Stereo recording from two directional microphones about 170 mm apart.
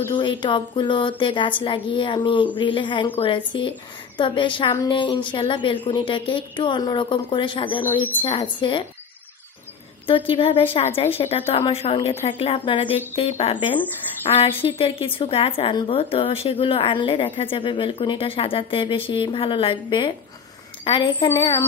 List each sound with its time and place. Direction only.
0.1 s speech: 30° left (ahead or behind)
10.0 s a woman's voice: 30° left (ahead or behind)